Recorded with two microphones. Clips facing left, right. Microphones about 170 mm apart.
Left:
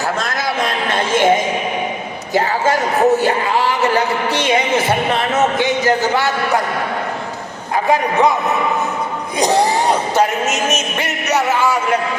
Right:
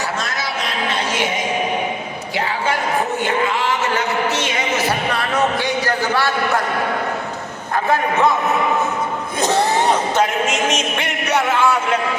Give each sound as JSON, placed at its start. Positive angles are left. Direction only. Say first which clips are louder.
{"t": 0.9, "sound": "music", "louder": "left 9 dB", "side_deg": 50}
{"t": 2.3, "sound": "a sound", "louder": "left 6 dB", "side_deg": 45}
{"t": 9.4, "sound": "speech", "louder": "left 2 dB", "side_deg": 15}